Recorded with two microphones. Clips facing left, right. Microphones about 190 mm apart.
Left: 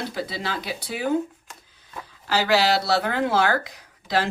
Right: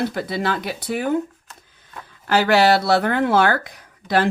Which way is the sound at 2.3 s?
55° right (ahead or behind).